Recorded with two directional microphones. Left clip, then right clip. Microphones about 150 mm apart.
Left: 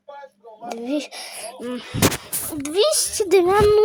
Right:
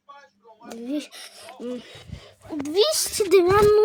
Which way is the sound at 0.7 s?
5° left (ahead or behind).